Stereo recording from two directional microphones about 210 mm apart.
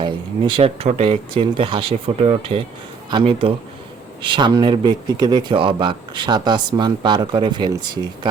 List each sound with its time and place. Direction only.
0.0 s speech: 25° right (ahead or behind)